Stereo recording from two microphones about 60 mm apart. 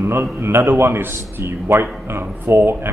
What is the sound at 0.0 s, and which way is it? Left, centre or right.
A man's voice, right.